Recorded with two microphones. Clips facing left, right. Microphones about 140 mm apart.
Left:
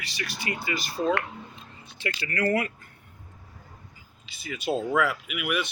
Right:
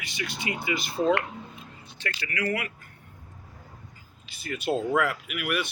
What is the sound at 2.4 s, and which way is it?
Speech, 35° left (ahead or behind).